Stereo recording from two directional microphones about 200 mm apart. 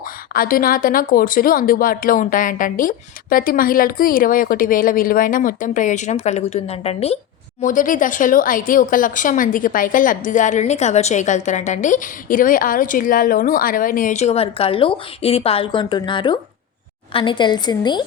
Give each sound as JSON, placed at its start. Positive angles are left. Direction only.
{"t": 0.3, "sound": "speech", "side_deg": 45}
{"t": 7.6, "sound": "a woman's voice", "side_deg": 40}